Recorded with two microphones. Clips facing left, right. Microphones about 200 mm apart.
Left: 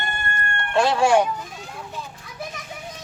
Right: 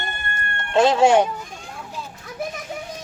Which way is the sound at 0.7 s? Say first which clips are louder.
Right 3 dB; 20° right (ahead or behind).